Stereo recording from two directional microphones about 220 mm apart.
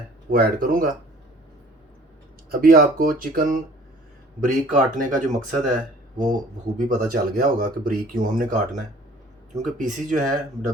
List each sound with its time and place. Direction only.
0.3 s speech: 40° right (ahead or behind)
2.5 s speech: 40° right (ahead or behind)